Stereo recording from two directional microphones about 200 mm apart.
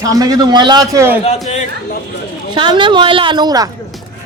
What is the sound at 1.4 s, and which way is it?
Speech, 35° left (ahead or behind).